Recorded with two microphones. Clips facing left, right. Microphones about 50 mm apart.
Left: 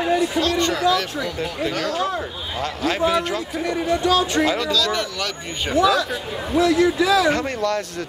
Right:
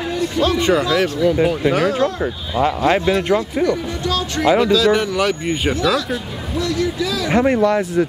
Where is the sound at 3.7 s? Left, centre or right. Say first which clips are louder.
Left 1 dB; centre.